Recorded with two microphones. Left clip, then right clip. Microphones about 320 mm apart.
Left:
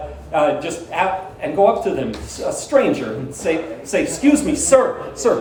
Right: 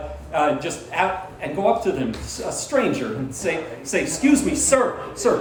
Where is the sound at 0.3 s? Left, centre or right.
Centre.